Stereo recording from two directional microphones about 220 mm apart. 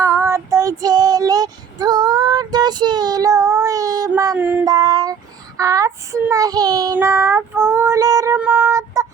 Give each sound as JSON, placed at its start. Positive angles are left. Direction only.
{"t": 0.0, "sound": "child singing", "side_deg": -10}
{"t": 4.6, "sound": "child singing", "side_deg": -20}